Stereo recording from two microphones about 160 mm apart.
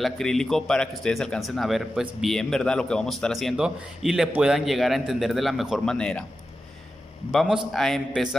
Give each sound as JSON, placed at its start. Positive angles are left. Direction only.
{"t": 0.0, "sound": "a man's voice", "side_deg": 5}
{"t": 7.2, "sound": "a man's voice", "side_deg": -5}